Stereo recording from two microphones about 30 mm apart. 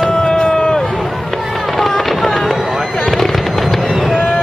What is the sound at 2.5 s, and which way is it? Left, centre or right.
Fireworks, centre.